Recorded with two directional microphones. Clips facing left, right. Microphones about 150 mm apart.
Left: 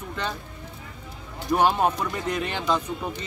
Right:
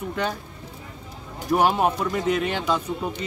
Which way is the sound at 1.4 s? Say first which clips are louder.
Right 1 dB; 10° right (ahead or behind).